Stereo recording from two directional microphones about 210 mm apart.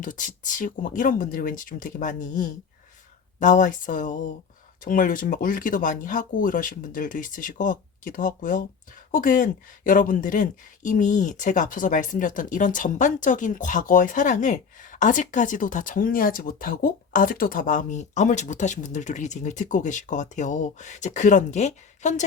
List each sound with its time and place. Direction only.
0.0 s speech: 40° left (ahead or behind)